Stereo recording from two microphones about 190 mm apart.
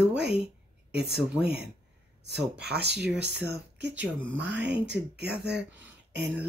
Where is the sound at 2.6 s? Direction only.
60° right (ahead or behind).